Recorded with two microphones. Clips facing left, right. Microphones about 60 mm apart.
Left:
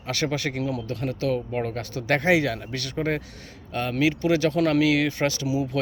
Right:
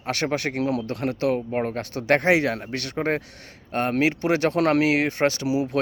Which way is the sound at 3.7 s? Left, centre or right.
Right.